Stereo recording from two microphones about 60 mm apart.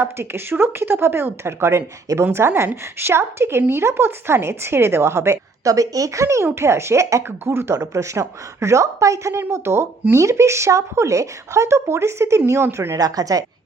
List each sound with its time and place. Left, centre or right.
0.0 s speech: right
6.4 s speech: right
7.3 s speech: right
13.0 s a woman's voice: right